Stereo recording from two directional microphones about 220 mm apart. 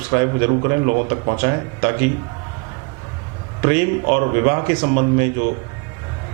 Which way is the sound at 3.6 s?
15° right (ahead or behind).